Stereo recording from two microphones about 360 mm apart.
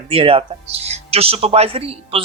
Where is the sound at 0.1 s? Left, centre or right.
Centre.